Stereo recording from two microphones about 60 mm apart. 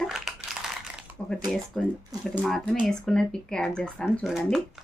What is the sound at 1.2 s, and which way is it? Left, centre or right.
Speech, centre.